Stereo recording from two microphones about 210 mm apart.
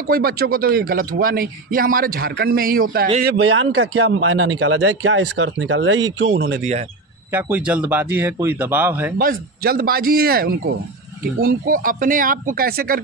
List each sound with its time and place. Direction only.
0.0 s speech: 45° right (ahead or behind)
3.3 s a man's voice: 75° right (ahead or behind); by 6.6 s 60° right (ahead or behind)
7.3 s speech: 10° right (ahead or behind)
9.2 s speech: 45° right (ahead or behind)